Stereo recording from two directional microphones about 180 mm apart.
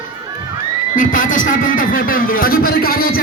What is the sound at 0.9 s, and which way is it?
A man's voice, 50° left (ahead or behind).